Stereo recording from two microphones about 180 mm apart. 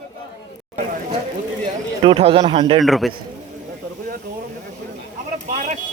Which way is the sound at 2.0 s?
30° right (ahead or behind).